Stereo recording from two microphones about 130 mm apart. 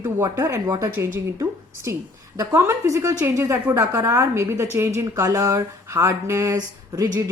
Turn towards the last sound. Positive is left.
turn(degrees=-30)  # may be behind; listen again after turning